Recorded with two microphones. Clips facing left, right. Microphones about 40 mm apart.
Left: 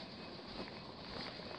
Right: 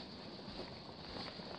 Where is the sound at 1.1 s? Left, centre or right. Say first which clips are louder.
Even; centre.